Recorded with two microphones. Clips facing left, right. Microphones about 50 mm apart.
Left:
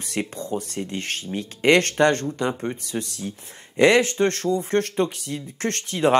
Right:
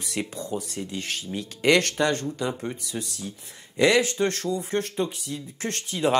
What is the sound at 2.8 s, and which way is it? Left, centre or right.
Speech, left.